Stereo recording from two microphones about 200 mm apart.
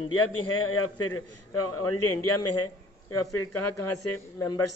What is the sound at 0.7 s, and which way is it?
Speech, 90° left.